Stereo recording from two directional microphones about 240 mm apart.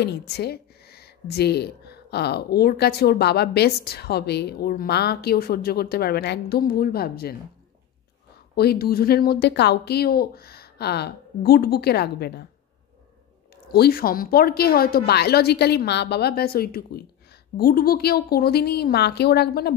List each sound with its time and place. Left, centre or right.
0.0 s speech: left
8.5 s speech: left
13.7 s speech: left